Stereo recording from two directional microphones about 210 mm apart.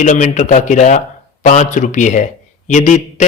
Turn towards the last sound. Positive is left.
turn(degrees=35)  # may be behind; listen again after turning